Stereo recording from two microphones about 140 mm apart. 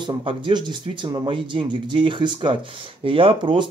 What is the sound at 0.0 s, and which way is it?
Speech, 35° right (ahead or behind).